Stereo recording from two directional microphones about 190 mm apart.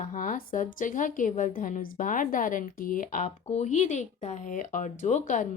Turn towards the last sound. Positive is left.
turn(degrees=40)  # may be behind; listen again after turning